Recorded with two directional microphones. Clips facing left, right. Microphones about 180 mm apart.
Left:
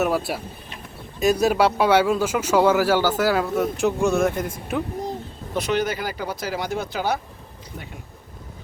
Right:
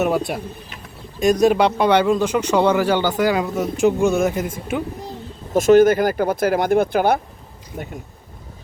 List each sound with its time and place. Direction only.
0.0 s speech: 5° left (ahead or behind)
5.5 s speech: 45° right (ahead or behind)